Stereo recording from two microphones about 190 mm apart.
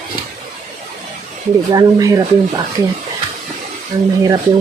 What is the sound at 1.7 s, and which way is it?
Speech, 20° right (ahead or behind).